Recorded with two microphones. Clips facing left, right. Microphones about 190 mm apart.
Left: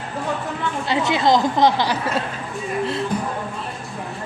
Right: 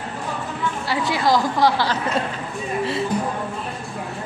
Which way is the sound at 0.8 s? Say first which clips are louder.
Left 3 dB; 20° left (ahead or behind).